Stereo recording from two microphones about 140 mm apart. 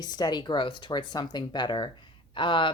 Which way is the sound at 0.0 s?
30° left (ahead or behind).